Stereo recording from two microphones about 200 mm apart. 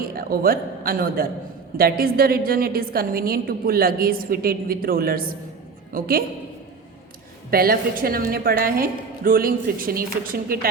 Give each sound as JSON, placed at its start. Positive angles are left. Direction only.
{"t": 0.0, "sound": "a woman's voice", "side_deg": -45}
{"t": 7.5, "sound": "a woman's voice", "side_deg": -45}